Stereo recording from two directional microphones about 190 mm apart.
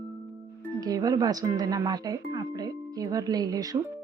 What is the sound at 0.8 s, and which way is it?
Speech, 20° right (ahead or behind).